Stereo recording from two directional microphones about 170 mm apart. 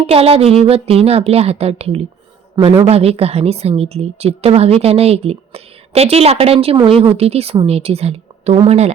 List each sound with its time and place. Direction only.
0.1 s a woman's voice: 35° right (ahead or behind)